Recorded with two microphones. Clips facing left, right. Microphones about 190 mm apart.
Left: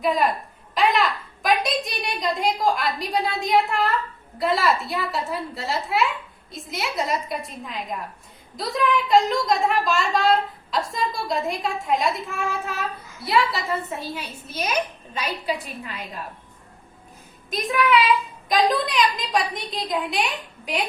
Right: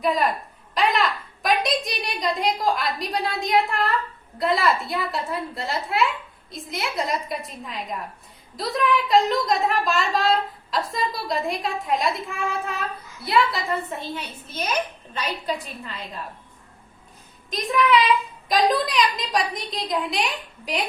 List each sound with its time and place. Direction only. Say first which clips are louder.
0.0 s a woman's voice: left 1 dB; centre (ahead or behind)
18.4 s a woman's voice: even; centre (ahead or behind)